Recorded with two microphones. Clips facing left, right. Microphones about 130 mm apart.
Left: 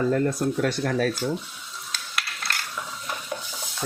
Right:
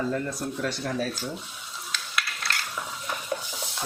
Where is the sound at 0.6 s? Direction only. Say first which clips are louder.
Left 4 dB; 70° left (ahead or behind).